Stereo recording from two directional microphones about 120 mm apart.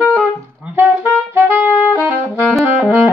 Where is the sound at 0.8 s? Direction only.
15° right (ahead or behind).